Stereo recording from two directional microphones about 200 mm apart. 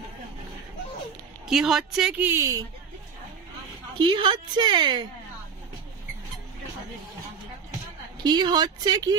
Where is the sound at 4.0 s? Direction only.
25° right (ahead or behind).